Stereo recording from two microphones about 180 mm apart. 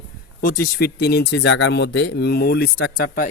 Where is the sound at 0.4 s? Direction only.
55° left (ahead or behind).